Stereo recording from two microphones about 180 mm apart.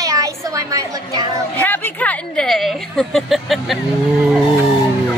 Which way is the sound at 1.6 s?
10° left (ahead or behind).